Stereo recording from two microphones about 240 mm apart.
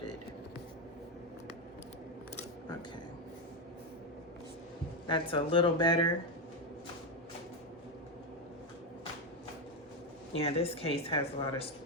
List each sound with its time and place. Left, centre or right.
5.0 s speech: left
10.3 s speech: left